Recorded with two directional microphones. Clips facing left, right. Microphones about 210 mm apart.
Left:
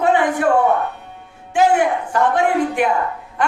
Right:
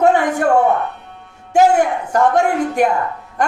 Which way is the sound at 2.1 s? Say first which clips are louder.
Right 3 dB; 45° right (ahead or behind).